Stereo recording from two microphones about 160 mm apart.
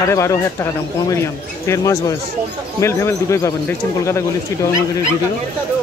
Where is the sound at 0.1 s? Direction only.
20° left (ahead or behind).